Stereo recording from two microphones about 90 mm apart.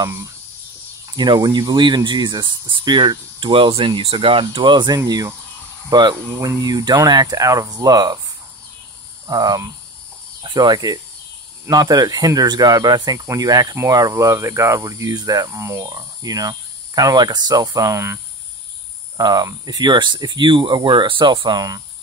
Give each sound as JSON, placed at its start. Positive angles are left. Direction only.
{"t": 1.1, "sound": "speech", "side_deg": -55}
{"t": 4.6, "sound": "speech", "side_deg": -60}
{"t": 4.9, "sound": "speech", "side_deg": -45}
{"t": 9.3, "sound": "speech", "side_deg": -45}
{"t": 15.8, "sound": "cricket", "side_deg": -45}
{"t": 19.1, "sound": "speech", "side_deg": -45}